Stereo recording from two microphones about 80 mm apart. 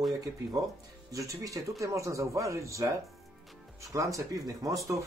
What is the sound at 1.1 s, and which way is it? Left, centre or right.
Speech, right.